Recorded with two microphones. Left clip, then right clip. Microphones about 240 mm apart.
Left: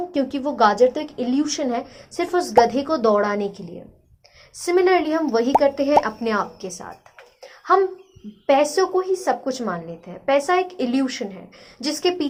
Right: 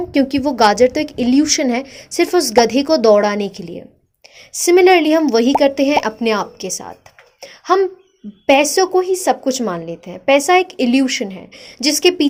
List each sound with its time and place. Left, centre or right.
0.1 s a woman's voice: right
7.4 s a sound: right
8.4 s a woman's voice: right